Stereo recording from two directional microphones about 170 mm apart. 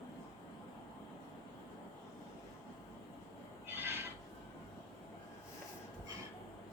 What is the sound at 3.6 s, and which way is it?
Train, 15° right (ahead or behind).